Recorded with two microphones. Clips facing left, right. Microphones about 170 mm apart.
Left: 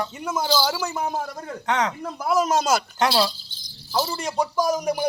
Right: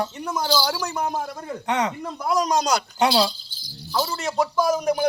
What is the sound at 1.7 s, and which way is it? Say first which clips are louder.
Speech: even; 10° right (ahead or behind).